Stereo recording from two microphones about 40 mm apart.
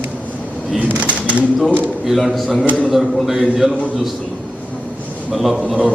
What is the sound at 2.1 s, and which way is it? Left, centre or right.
A man's voice, centre.